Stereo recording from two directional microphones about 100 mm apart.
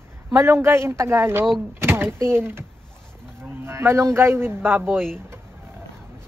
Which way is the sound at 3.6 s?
25° right (ahead or behind).